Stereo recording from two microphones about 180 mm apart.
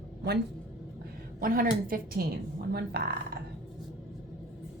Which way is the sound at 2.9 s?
65° right (ahead or behind).